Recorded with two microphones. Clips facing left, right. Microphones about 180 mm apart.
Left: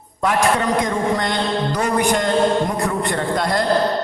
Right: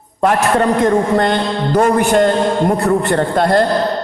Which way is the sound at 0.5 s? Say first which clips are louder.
Right 7 dB; 50° right (ahead or behind).